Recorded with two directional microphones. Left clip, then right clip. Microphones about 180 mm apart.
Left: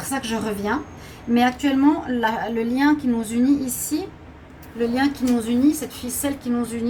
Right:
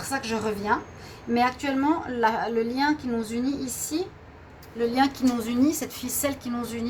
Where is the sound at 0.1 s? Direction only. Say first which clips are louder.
Left 2 dB; 50° right (ahead or behind).